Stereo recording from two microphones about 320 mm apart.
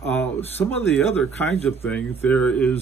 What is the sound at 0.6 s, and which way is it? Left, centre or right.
Speech, centre.